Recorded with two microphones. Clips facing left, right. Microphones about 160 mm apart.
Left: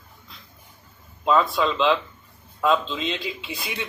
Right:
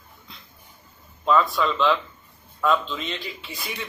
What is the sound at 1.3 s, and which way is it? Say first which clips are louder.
A man's voice: even; 25° left (ahead or behind).